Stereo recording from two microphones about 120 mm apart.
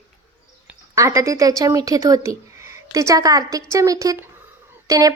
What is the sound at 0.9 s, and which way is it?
A woman's voice, 25° right (ahead or behind).